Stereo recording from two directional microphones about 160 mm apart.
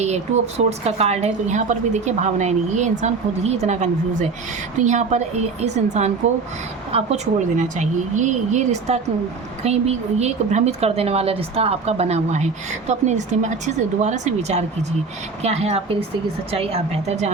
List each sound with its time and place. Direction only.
0.0 s a woman's voice: 40° right (ahead or behind)